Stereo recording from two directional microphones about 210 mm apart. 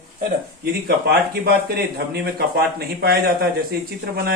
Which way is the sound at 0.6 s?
50° right (ahead or behind).